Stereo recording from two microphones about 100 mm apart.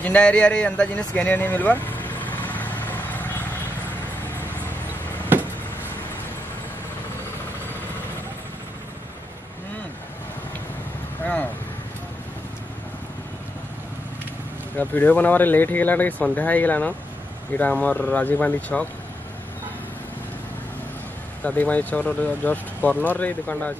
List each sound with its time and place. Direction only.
0.0 s vehicle: 10° left (ahead or behind)
14.8 s speech: 15° left (ahead or behind)
21.5 s speech: 15° left (ahead or behind)